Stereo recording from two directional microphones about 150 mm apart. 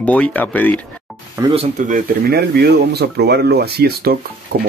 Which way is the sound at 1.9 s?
90° right.